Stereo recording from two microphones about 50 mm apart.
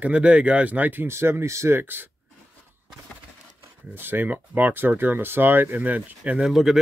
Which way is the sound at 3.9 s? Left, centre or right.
Right.